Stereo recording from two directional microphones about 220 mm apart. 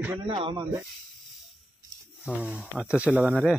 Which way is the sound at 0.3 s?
25° right (ahead or behind).